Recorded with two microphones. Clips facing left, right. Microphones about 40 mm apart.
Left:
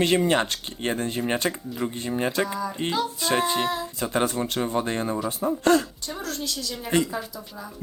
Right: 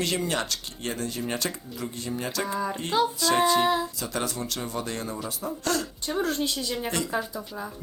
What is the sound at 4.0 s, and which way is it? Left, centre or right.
Speech, left.